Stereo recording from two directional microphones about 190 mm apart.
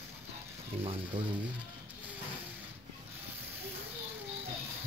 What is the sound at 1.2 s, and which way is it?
Speech, 30° right (ahead or behind).